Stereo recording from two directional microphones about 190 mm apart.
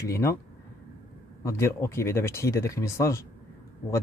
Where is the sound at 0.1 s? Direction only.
15° left (ahead or behind).